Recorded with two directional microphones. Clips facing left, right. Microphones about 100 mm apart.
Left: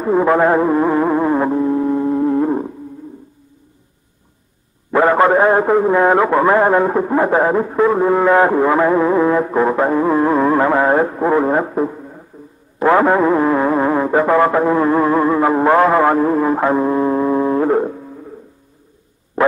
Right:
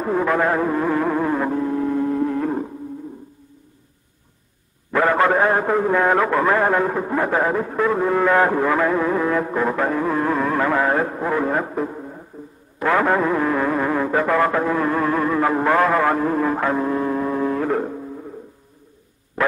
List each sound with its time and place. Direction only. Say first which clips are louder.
0.1 s music: left 7 dB; 25° left (ahead or behind)
4.9 s a man's voice: left 5 dB; 25° left (ahead or behind)